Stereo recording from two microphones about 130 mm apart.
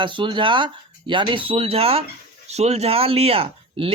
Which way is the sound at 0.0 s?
40° right (ahead or behind).